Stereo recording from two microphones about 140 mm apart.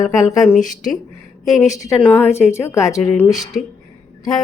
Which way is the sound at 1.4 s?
Centre (ahead or behind).